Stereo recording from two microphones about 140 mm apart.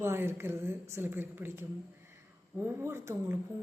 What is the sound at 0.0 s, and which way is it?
A woman's voice, 15° right (ahead or behind).